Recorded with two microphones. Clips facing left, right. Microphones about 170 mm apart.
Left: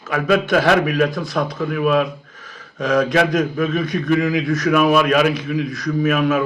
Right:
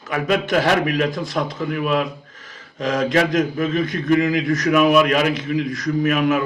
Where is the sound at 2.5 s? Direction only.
20° right (ahead or behind).